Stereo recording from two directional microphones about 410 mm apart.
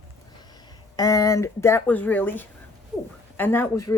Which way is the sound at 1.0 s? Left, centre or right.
Centre.